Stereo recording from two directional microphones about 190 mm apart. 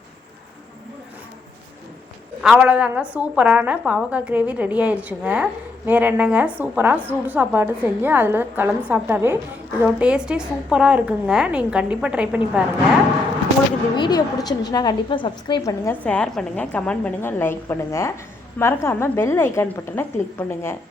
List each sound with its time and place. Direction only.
2.4 s a woman's voice: 5° right (ahead or behind)
13.9 s a woman's voice: 20° left (ahead or behind)